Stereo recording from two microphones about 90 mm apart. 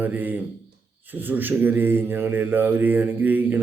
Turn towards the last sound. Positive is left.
turn(degrees=-20)  # may be behind; listen again after turning